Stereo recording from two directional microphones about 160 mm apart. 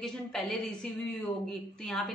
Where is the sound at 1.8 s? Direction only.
Centre (ahead or behind).